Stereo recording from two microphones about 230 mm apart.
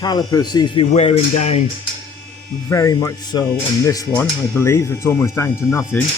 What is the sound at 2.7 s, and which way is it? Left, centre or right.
Speech, centre.